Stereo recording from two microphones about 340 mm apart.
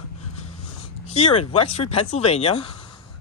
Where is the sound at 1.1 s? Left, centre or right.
Centre.